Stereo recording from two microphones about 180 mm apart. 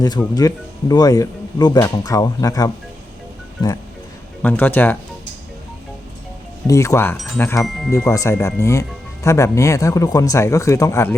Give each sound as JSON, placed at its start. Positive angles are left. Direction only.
{"t": 0.0, "sound": "speech", "side_deg": 20}
{"t": 4.4, "sound": "speech", "side_deg": 10}
{"t": 6.7, "sound": "speech", "side_deg": 15}